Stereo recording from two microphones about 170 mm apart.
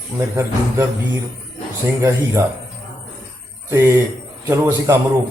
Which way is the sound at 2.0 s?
15° right (ahead or behind).